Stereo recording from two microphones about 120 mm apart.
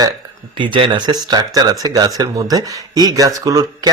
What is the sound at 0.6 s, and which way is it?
A man's voice, 45° right (ahead or behind).